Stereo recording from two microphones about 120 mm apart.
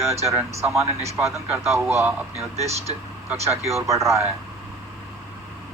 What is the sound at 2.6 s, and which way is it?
Speech, 60° right (ahead or behind).